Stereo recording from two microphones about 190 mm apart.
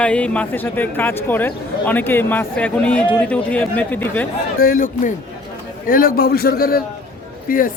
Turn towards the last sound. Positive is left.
turn(degrees=50)  # may be behind; listen again after turning